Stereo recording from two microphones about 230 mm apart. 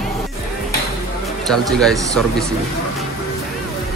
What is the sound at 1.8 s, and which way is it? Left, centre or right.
Speech, centre.